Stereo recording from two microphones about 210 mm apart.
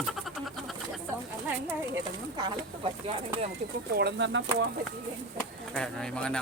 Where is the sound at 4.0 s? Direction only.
55° right (ahead or behind).